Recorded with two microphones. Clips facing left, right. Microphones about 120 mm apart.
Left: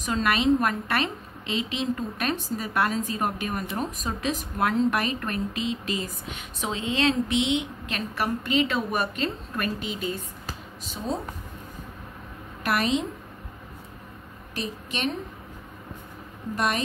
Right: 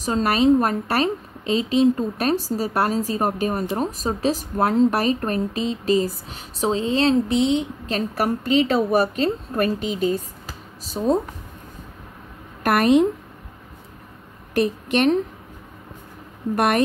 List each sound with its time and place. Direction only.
0.0 s a woman's voice: 35° right (ahead or behind)
12.6 s a woman's voice: 55° right (ahead or behind)
14.5 s a woman's voice: 55° right (ahead or behind)
16.5 s a woman's voice: 60° right (ahead or behind)